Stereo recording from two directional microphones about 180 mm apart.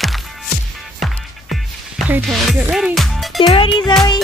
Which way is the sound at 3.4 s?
30° left (ahead or behind).